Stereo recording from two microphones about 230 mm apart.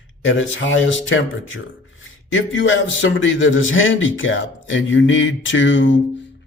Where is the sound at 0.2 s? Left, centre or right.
Left.